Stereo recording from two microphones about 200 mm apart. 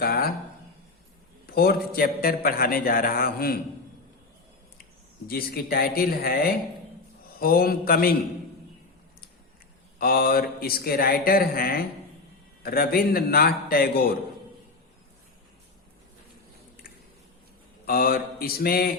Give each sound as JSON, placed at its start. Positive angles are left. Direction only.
{"t": 0.0, "sound": "a sound", "side_deg": 50}
{"t": 1.5, "sound": "a man's voice", "side_deg": 50}
{"t": 5.3, "sound": "a man's voice", "side_deg": 50}
{"t": 10.0, "sound": "a man's voice", "side_deg": 50}
{"t": 17.8, "sound": "a man's voice", "side_deg": 45}